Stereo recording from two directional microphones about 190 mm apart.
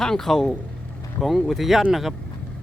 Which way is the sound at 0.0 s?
Centre (ahead or behind).